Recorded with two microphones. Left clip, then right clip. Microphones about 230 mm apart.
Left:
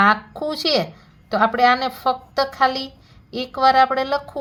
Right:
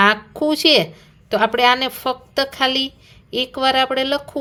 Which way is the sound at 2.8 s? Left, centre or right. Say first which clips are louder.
Right 8 dB; right.